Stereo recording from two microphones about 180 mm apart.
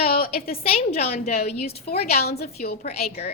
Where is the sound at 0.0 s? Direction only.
55° left (ahead or behind).